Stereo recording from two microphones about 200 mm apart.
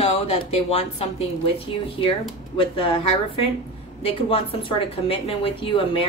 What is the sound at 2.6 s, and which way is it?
A woman's voice, 25° left (ahead or behind).